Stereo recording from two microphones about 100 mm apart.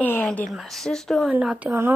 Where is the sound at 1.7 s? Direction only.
20° right (ahead or behind).